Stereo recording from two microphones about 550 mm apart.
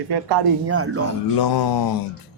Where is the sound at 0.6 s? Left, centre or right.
Right.